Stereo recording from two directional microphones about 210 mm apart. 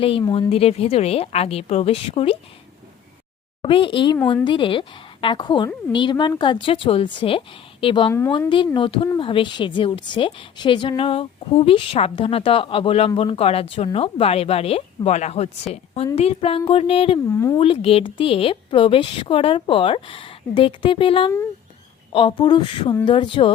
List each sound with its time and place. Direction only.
0.3 s a woman's voice: 30° left (ahead or behind)
3.6 s a woman's voice: 25° left (ahead or behind)
17.2 s speech: 10° left (ahead or behind)
17.6 s a woman's voice: 25° left (ahead or behind)